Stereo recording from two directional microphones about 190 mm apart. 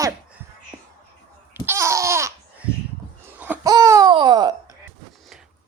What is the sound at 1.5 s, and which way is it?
Babbling, 10° right (ahead or behind).